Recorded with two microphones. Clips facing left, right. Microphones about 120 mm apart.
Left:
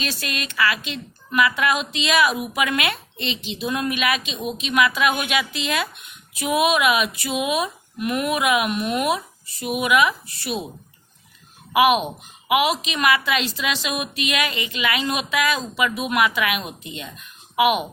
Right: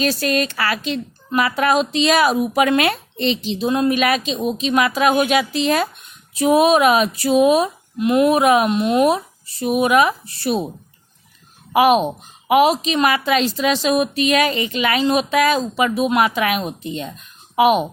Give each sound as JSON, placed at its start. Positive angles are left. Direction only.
{"t": 0.0, "sound": "speech", "side_deg": -40}
{"t": 7.9, "sound": "speech", "side_deg": -25}
{"t": 11.7, "sound": "speech", "side_deg": -35}